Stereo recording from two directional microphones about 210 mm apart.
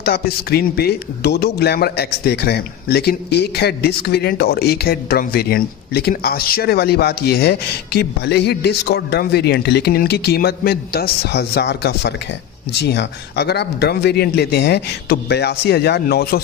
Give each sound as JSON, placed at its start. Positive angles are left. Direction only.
{"t": 0.0, "sound": "speech", "side_deg": 50}